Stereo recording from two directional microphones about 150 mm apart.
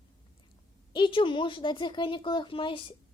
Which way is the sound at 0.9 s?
35° left (ahead or behind).